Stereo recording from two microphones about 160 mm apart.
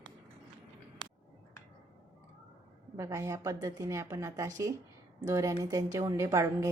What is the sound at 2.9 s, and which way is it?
A woman's voice, 20° right (ahead or behind).